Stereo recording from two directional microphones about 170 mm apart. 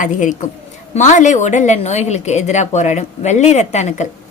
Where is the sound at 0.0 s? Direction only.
50° left (ahead or behind).